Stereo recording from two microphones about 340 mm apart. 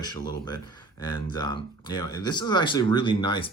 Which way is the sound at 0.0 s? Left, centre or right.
Centre.